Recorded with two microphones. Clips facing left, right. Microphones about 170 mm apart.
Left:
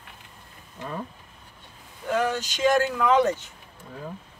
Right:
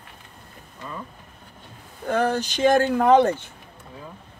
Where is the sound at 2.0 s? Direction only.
60° right (ahead or behind).